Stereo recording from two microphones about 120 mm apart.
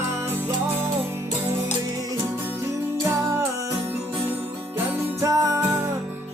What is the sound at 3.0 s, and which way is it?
Music, 20° right (ahead or behind).